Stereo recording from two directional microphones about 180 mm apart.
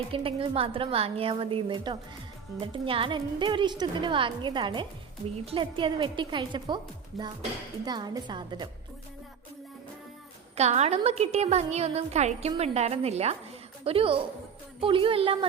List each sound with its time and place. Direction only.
0.1 s a woman's voice: 30° right (ahead or behind)
7.1 s speech: centre (ahead or behind)
7.9 s a woman's voice: 20° right (ahead or behind)
10.6 s a woman's voice: 40° right (ahead or behind)